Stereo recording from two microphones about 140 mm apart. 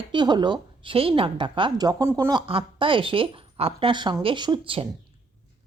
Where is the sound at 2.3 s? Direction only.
40° right (ahead or behind).